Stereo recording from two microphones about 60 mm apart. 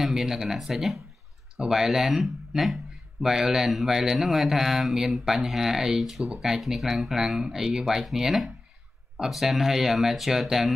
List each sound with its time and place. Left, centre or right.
0.0 s speech: centre